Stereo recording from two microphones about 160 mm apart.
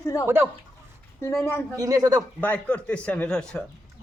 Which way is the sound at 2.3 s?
10° left (ahead or behind).